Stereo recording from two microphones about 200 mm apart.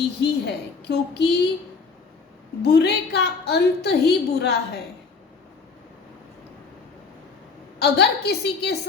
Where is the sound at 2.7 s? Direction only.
55° left (ahead or behind).